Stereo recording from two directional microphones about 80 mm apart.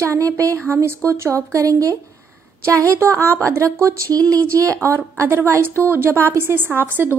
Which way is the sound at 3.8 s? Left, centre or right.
Right.